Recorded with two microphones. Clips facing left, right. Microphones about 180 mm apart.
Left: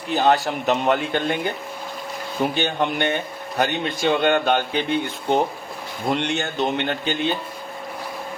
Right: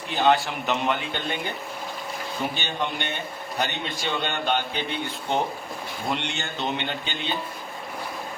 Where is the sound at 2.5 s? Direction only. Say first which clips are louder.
Left 7 dB; 50° left (ahead or behind).